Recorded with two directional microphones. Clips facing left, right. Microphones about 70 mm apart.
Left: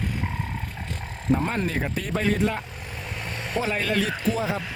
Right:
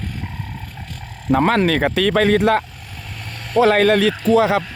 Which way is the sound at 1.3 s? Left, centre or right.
Right.